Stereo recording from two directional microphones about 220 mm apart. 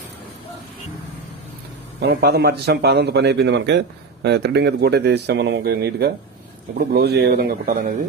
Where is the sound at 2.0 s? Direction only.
50° right (ahead or behind).